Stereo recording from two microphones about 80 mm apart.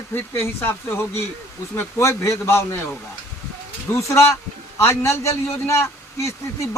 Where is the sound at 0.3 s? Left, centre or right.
Left.